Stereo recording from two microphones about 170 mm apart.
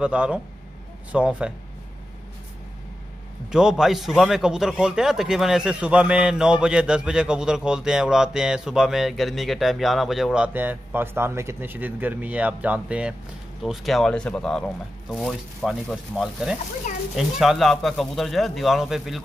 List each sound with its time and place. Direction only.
0.0 s speech: 5° right (ahead or behind)
3.5 s speech: 5° right (ahead or behind)